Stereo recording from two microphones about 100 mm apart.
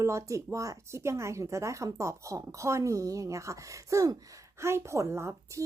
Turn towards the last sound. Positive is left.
turn(degrees=-30)  # may be behind; listen again after turning